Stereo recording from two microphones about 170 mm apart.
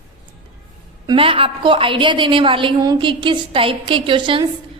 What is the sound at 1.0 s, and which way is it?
A woman's voice, 30° right (ahead or behind).